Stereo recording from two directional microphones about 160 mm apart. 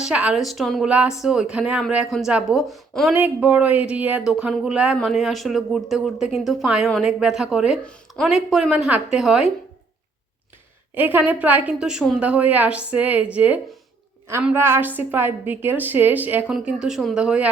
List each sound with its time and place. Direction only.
0.0 s speech: 5° right (ahead or behind)
3.2 s a woman's voice: 10° right (ahead or behind)
10.9 s a woman's voice: 10° right (ahead or behind)